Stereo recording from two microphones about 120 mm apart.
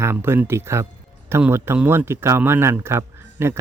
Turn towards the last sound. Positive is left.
turn(degrees=-20)  # may be behind; listen again after turning